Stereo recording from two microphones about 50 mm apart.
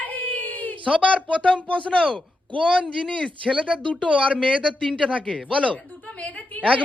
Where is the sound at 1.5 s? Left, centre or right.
Left.